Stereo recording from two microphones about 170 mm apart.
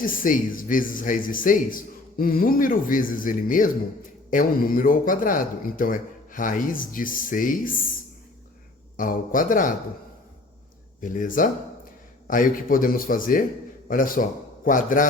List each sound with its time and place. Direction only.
0.0 s a man's voice: 55° left (ahead or behind)
9.0 s a man's voice: 55° left (ahead or behind)
11.0 s a man's voice: 50° left (ahead or behind)